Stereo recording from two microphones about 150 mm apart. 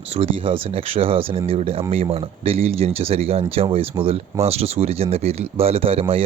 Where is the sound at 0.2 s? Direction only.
40° right (ahead or behind).